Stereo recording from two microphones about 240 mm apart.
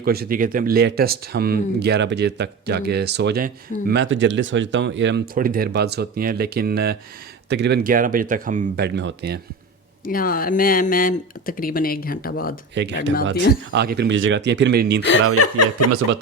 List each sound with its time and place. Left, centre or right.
0.0 s speech: right
10.0 s speech: left
12.8 s speech: right
15.4 s speech: left